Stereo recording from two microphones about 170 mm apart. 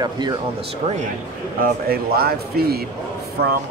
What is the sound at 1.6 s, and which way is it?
Speech, 65° right (ahead or behind).